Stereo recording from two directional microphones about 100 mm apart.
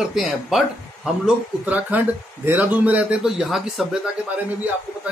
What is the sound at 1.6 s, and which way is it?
A man's voice, 15° right (ahead or behind).